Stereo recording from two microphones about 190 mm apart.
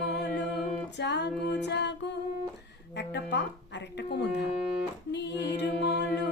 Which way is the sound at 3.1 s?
65° left (ahead or behind).